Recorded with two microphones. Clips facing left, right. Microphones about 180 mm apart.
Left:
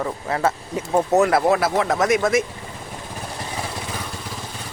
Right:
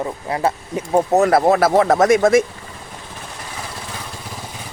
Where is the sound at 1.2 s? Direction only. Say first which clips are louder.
Right 4 dB; 40° right (ahead or behind).